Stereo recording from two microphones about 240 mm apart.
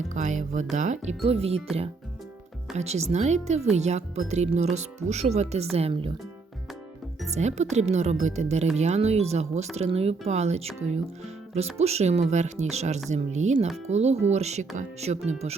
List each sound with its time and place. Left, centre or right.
0.1 s speech: right
2.7 s speech: right
7.3 s speech: right